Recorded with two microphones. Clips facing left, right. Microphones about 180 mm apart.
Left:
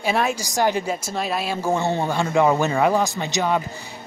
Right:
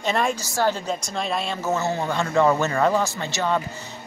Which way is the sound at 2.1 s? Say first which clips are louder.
Even; 15° left (ahead or behind).